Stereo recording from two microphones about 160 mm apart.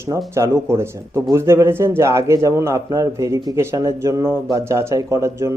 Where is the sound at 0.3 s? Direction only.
15° right (ahead or behind).